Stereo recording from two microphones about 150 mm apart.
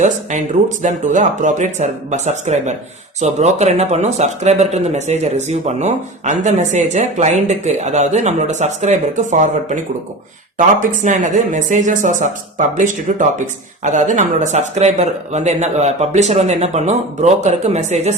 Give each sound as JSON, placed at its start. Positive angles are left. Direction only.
{"t": 0.0, "sound": "speech", "side_deg": -55}
{"t": 10.8, "sound": "speech", "side_deg": -55}